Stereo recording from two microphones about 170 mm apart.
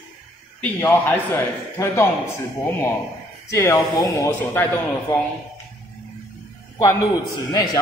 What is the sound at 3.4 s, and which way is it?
Speech, 20° left (ahead or behind).